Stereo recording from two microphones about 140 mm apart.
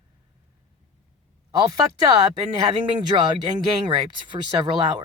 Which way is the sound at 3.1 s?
35° right (ahead or behind).